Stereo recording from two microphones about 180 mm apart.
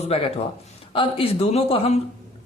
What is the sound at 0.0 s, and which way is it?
A man's voice, 35° left (ahead or behind).